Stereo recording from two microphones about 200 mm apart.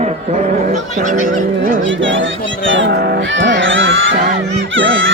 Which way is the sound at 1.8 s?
70° right (ahead or behind).